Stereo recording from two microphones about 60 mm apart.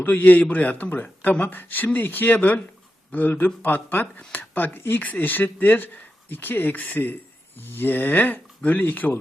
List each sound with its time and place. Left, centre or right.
0.0 s speech: left